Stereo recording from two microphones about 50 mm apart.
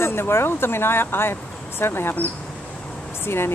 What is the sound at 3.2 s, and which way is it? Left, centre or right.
Speech, left.